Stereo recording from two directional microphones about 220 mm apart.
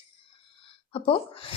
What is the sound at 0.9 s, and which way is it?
Speech, 25° left (ahead or behind).